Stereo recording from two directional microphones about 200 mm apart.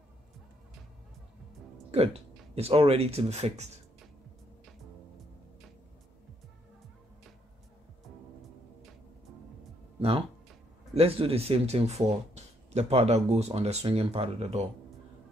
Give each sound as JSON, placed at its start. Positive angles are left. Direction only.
{"t": 1.9, "sound": "speech", "side_deg": -30}
{"t": 11.0, "sound": "speech", "side_deg": -30}